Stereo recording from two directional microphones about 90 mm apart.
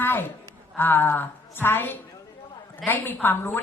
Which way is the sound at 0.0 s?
25° left (ahead or behind).